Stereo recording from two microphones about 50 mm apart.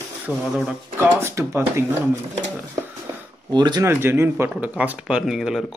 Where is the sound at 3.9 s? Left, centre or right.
Right.